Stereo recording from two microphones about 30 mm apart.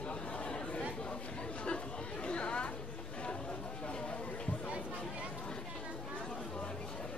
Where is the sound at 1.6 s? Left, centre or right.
Left.